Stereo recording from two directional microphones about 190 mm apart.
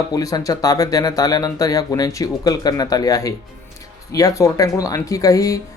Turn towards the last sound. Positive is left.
turn(degrees=15)  # may be behind; listen again after turning